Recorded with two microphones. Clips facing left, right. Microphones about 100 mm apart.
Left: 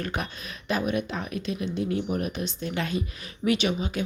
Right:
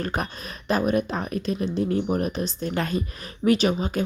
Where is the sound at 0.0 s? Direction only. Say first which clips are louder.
Right 4 dB; 40° right (ahead or behind).